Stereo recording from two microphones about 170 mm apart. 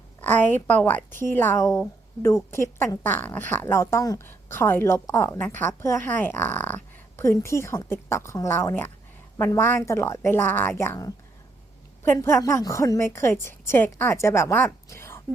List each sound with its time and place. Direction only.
0.2 s speech: 10° left (ahead or behind)